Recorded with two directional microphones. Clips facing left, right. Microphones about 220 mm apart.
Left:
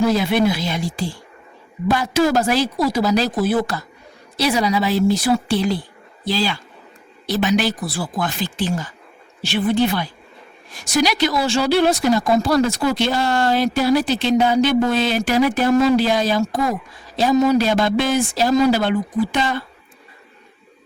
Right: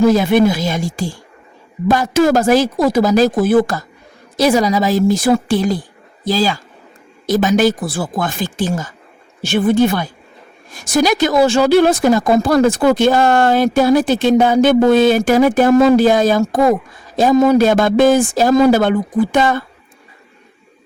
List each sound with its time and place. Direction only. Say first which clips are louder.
0.0 s a woman's voice: right 6 dB; 45° right (ahead or behind)